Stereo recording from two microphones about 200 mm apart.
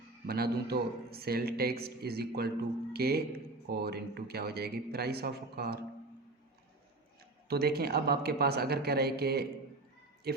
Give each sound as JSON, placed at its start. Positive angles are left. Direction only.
{"t": 0.3, "sound": "speech", "side_deg": -50}
{"t": 7.4, "sound": "speech", "side_deg": -50}